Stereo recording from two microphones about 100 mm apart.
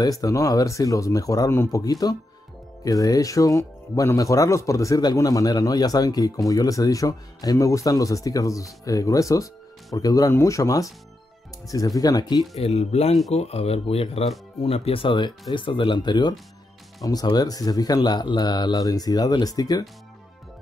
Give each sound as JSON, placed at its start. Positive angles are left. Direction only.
{"t": 0.0, "sound": "speech", "side_deg": 35}
{"t": 1.5, "sound": "a man's voice", "side_deg": 25}
{"t": 1.8, "sound": "speech", "side_deg": 40}
{"t": 12.5, "sound": "speech", "side_deg": 90}